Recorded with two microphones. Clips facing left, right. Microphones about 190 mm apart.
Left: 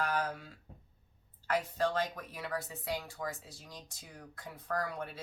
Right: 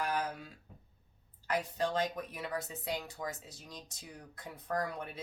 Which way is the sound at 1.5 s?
15° right (ahead or behind).